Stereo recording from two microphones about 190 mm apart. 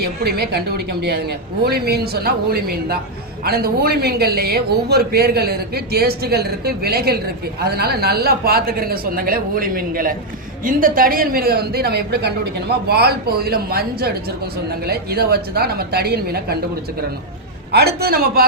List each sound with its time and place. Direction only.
0.0 s a man's voice: 55° right (ahead or behind)
17.7 s speech: 55° right (ahead or behind)